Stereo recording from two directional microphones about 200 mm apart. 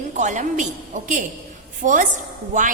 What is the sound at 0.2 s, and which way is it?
A woman's voice, 40° right (ahead or behind).